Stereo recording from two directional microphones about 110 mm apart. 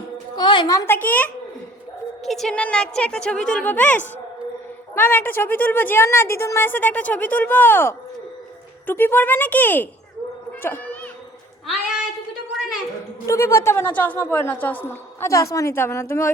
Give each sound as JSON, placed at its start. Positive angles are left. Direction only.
{"t": 0.3, "sound": "a sound", "side_deg": 40}
{"t": 0.7, "sound": "a woman's voice", "side_deg": 20}
{"t": 2.2, "sound": "a woman's voice", "side_deg": 0}
{"t": 10.6, "sound": "cat", "side_deg": 20}
{"t": 13.2, "sound": "a woman's voice", "side_deg": 25}